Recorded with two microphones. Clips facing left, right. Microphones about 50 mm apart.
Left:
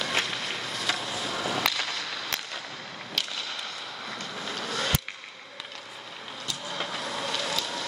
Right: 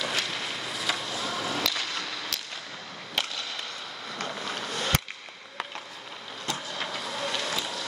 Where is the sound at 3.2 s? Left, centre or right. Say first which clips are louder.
Right 2 dB; right.